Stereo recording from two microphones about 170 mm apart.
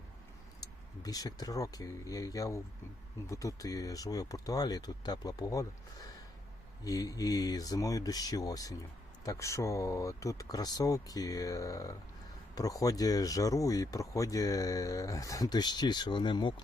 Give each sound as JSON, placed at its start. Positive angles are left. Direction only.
{"t": 0.6, "sound": "speech", "side_deg": 20}